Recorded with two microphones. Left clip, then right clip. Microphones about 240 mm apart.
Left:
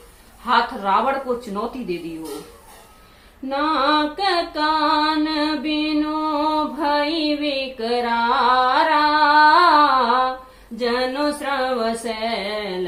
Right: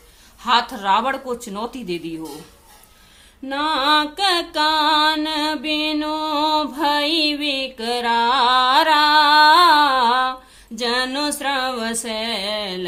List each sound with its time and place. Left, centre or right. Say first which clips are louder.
0.4 s a woman's voice: right 1 dB; right
3.5 s mantra: right 1 dB; right
10.8 s female singing: even; right